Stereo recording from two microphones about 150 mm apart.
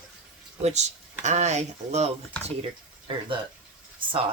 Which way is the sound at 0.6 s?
50° right (ahead or behind).